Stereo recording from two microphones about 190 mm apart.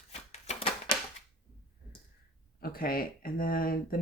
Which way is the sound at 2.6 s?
50° left (ahead or behind).